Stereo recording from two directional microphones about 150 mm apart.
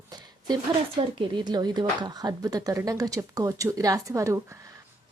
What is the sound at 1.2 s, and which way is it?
A woman's voice, 30° right (ahead or behind).